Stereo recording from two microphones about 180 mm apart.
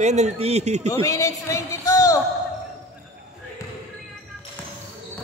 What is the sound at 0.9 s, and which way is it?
A man's voice, 20° left (ahead or behind).